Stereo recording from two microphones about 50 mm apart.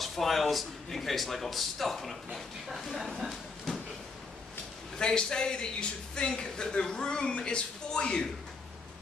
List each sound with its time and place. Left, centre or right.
0.0 s a man's voice: centre
3.2 s a sound: centre
4.9 s a man's voice: centre